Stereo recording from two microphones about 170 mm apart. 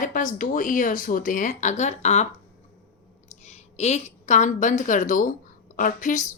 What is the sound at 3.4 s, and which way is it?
A woman's voice, 40° left (ahead or behind).